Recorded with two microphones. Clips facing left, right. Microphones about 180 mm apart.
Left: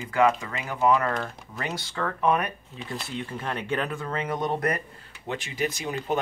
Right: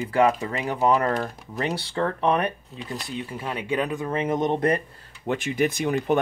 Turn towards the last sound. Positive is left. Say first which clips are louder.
# right 6 dB
turn(degrees=-55)  # may be behind; listen again after turning